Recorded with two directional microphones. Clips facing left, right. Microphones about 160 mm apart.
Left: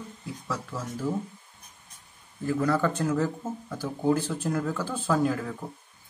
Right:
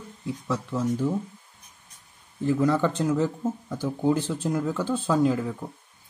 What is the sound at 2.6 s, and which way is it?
Speech, 20° right (ahead or behind).